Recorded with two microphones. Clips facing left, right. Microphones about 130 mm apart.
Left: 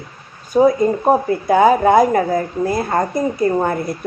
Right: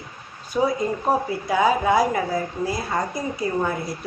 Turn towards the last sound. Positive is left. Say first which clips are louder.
# left 7 dB
turn(degrees=50)  # may be behind; listen again after turning